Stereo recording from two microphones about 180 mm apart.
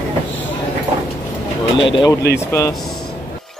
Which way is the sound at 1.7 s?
25° left (ahead or behind).